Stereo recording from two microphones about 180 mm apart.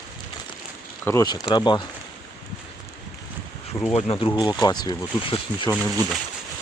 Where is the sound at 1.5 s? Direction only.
25° left (ahead or behind).